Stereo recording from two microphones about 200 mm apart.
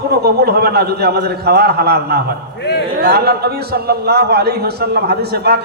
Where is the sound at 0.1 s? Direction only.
50° right (ahead or behind).